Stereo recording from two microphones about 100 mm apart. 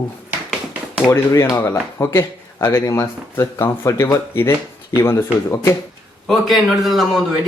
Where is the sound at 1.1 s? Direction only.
35° left (ahead or behind).